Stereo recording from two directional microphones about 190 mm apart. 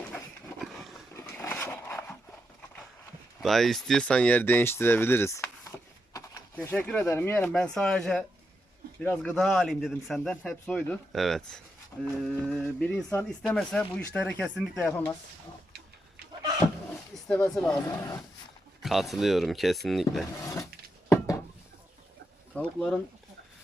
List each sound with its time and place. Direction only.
0.1 s a sound: 10° left (ahead or behind)
1.1 s dog: 10° left (ahead or behind)
3.4 s speech: centre (ahead or behind); by 6.4 s 15° left (ahead or behind)
6.6 s a man's voice: 5° left (ahead or behind)
17.2 s a man's voice: 5° left (ahead or behind)
17.8 s speech: 15° left (ahead or behind)
18.8 s a man's voice: centre (ahead or behind)
20.4 s wood: 15° left (ahead or behind)
21.1 s a sound: 15° left (ahead or behind)
22.5 s speech: 5° left (ahead or behind)